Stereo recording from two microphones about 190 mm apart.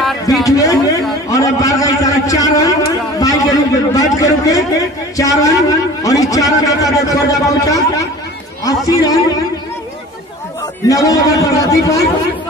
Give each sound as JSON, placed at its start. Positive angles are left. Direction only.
{"t": 0.4, "sound": "a sound", "side_deg": 15}
{"t": 8.6, "sound": "a man's voice", "side_deg": 20}
{"t": 10.9, "sound": "a man's voice", "side_deg": 20}